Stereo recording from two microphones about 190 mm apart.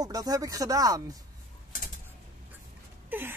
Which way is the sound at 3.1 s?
10° right (ahead or behind).